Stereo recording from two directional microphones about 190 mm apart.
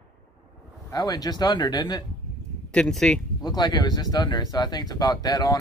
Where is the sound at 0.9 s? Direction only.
20° left (ahead or behind).